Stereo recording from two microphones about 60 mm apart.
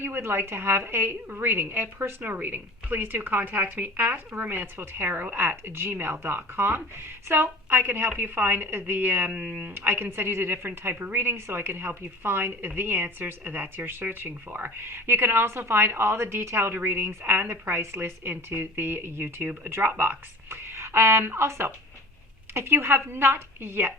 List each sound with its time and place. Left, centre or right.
0.0 s speech: right
9.3 s speech: right